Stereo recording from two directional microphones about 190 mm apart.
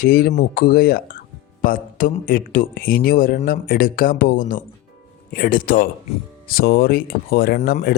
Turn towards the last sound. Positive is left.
turn(degrees=55)  # may be behind; listen again after turning